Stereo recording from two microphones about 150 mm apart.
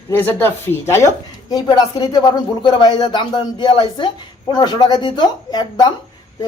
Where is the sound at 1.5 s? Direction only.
25° left (ahead or behind).